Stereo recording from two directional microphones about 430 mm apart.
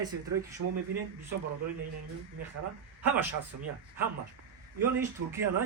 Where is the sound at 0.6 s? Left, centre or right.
Right.